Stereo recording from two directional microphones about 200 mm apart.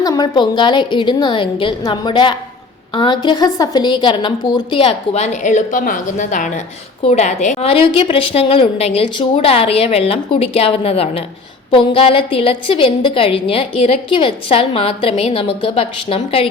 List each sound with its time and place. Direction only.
0.0 s a woman's voice: 20° left (ahead or behind)